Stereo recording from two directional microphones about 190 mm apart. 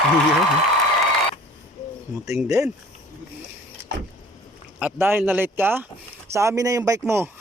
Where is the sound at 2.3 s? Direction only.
15° right (ahead or behind).